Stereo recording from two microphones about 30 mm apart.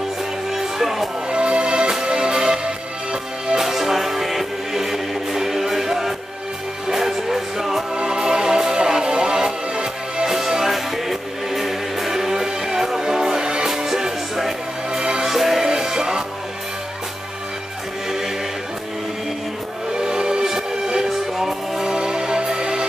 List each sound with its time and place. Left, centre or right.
0.5 s music: centre
1.3 s music: right
3.6 s music: centre
7.9 s music: right
10.2 s music: centre
13.0 s music: centre
15.2 s music: centre
20.0 s music: right; by 21.8 s centre
21.8 s music: right